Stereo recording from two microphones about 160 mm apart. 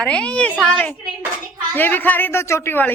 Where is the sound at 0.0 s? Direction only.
5° left (ahead or behind).